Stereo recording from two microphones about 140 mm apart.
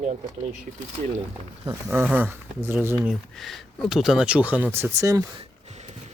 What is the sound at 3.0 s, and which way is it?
Speech, centre (ahead or behind).